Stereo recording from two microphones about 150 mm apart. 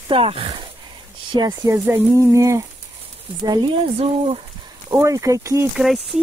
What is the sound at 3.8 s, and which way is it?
Speech, 40° right (ahead or behind).